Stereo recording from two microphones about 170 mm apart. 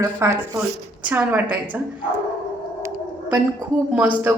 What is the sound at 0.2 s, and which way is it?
Speech, 20° right (ahead or behind).